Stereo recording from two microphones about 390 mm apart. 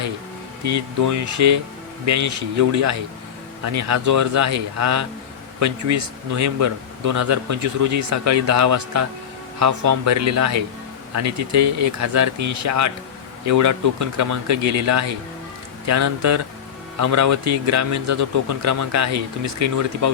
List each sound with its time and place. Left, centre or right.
0.6 s a man's voice: right